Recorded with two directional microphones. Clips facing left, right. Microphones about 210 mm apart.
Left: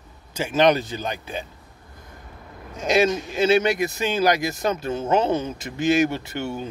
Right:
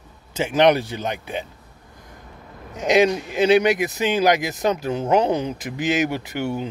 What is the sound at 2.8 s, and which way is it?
Speech, 20° right (ahead or behind).